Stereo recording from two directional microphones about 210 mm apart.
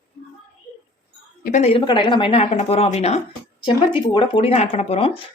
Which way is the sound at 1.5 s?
35° left (ahead or behind).